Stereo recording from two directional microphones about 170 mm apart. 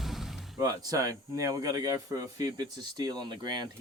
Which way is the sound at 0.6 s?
20° right (ahead or behind).